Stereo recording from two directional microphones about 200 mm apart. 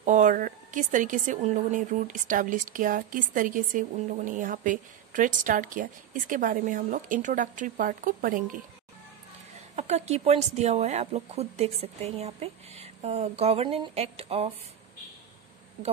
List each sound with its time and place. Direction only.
0.0 s speech: 40° right (ahead or behind)
9.8 s speech: 35° right (ahead or behind)